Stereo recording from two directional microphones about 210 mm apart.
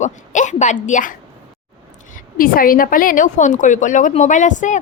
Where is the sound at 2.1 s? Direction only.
40° left (ahead or behind).